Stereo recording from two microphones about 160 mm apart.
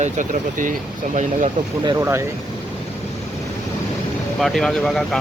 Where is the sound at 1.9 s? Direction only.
15° right (ahead or behind).